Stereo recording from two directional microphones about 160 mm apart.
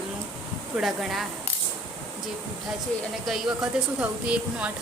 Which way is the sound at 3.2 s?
Centre (ahead or behind).